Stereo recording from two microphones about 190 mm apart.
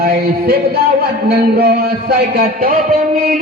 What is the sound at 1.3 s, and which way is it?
Music, 55° right (ahead or behind).